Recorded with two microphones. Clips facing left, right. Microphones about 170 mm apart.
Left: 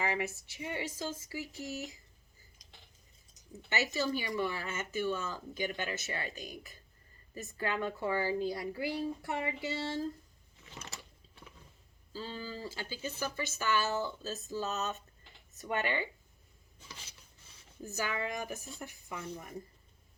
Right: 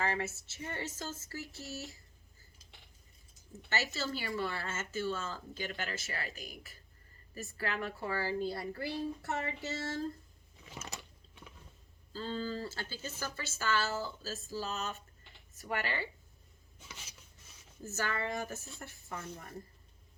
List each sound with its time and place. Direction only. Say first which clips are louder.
0.0 s speech: left 1 dB; 15° left (ahead or behind)
3.3 s speech: left 2 dB; 15° left (ahead or behind)
10.8 s biting: right 2 dB; 15° right (ahead or behind)
12.1 s speech: right 4 dB; 10° left (ahead or behind)
17.0 s rub: right 1 dB; 30° left (ahead or behind)
17.8 s speech: even; 15° left (ahead or behind)